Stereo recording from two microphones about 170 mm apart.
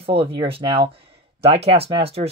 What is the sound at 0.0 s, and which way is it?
Speech, 35° right (ahead or behind).